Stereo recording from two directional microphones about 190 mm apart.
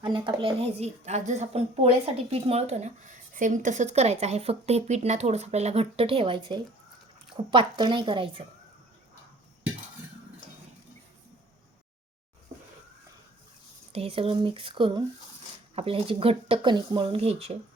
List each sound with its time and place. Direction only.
0.0 s a woman's voice: 25° right (ahead or behind)
7.5 s speech: 25° right (ahead or behind)
13.9 s a woman's voice: 30° right (ahead or behind)